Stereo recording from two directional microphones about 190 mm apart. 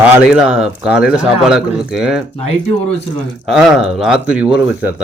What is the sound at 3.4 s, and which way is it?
A man's voice, centre (ahead or behind).